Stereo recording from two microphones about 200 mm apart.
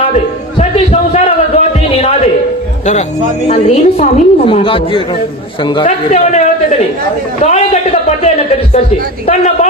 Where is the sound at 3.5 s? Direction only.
35° left (ahead or behind).